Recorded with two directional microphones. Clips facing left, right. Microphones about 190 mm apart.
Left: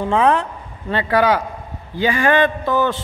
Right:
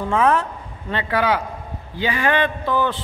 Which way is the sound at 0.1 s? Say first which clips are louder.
Left 1 dB; 30° left (ahead or behind).